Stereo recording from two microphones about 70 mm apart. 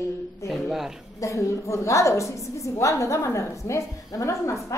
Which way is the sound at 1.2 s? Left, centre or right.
Left.